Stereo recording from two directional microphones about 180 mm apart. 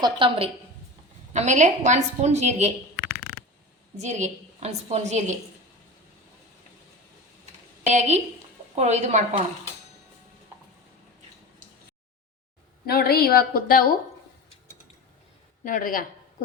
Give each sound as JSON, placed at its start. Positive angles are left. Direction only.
{"t": 0.0, "sound": "a woman's voice", "side_deg": -30}
{"t": 1.3, "sound": "a woman's voice", "side_deg": -40}
{"t": 3.9, "sound": "a woman's voice", "side_deg": -40}
{"t": 7.9, "sound": "a woman's voice", "side_deg": -40}
{"t": 12.8, "sound": "a woman's voice", "side_deg": 60}
{"t": 15.6, "sound": "speech", "side_deg": 50}